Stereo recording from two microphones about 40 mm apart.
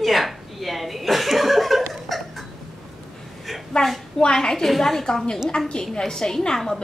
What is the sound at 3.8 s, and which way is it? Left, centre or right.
A woman's voice, centre.